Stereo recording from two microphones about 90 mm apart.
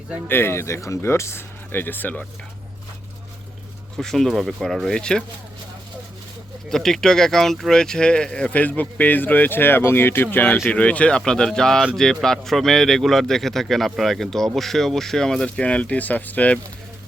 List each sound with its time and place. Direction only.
0.3 s speech: 25° left (ahead or behind)
3.9 s a man's voice: 5° left (ahead or behind)
6.7 s a man's voice: 5° left (ahead or behind)